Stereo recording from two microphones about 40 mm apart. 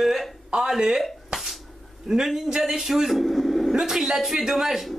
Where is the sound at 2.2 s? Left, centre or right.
Centre.